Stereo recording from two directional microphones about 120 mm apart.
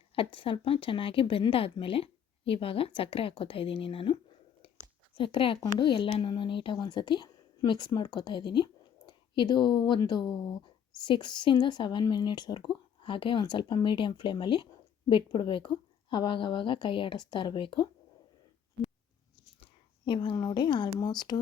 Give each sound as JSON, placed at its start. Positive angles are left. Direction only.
{"t": 0.2, "sound": "a woman's voice", "side_deg": 45}
{"t": 19.5, "sound": "a sound", "side_deg": 45}
{"t": 20.3, "sound": "speech", "side_deg": 35}